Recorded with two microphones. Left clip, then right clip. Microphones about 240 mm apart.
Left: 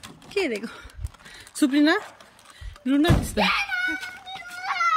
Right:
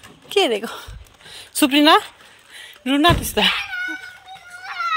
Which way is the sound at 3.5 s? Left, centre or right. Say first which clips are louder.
Even; left.